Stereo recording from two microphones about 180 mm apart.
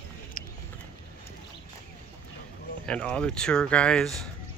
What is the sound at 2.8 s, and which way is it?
Speech, 5° left (ahead or behind).